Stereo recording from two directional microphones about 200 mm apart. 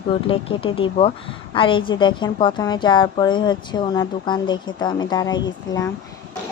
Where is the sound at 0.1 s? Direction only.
25° left (ahead or behind).